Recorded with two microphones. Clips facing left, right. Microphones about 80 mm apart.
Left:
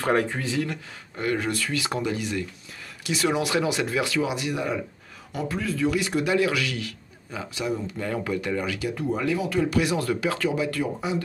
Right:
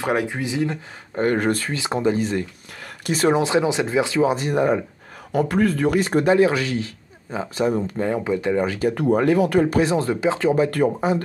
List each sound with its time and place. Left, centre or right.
0.0 s speech: centre
1.1 s a man's voice: right
5.5 s a man's voice: right
8.1 s speech: right
8.9 s speech: right
10.5 s speech: right